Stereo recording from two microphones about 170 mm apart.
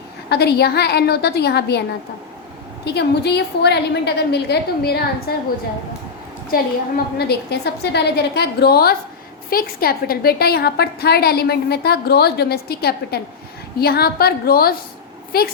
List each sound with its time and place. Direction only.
0.3 s a woman's voice: 70° left (ahead or behind)
2.8 s a woman's voice: 75° left (ahead or behind)
6.5 s a woman's voice: 65° left (ahead or behind)